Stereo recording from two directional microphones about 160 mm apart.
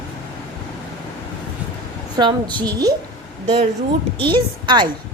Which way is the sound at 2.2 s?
30° right (ahead or behind).